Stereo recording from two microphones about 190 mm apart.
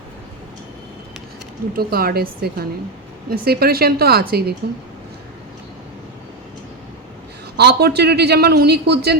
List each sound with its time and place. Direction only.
1.7 s a woman's voice: 55° right (ahead or behind)
7.5 s a man's voice: 60° right (ahead or behind)